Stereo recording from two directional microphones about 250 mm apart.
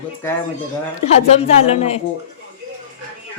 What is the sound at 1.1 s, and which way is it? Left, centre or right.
Speech, left.